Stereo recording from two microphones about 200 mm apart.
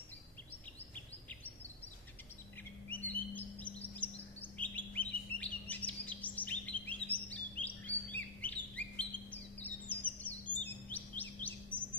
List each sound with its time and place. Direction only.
2.9 s chirp: 10° left (ahead or behind)